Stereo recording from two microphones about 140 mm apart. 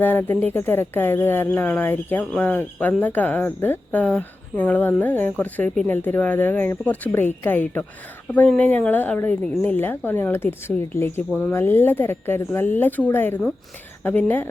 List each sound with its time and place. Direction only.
0.0 s a woman's voice: 15° left (ahead or behind)